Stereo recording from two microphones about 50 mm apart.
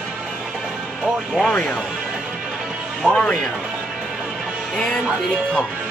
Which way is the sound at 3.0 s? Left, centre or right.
Centre.